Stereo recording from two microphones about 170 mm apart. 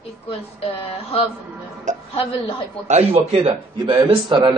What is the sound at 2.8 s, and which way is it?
A man's voice, 40° right (ahead or behind).